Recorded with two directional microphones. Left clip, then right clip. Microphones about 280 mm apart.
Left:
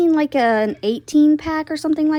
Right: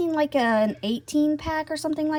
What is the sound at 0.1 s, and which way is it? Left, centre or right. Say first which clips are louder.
Speech: left 6 dB; left.